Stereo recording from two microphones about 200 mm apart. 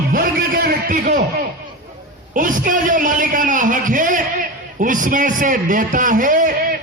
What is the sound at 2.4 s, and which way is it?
A man's voice, 40° right (ahead or behind).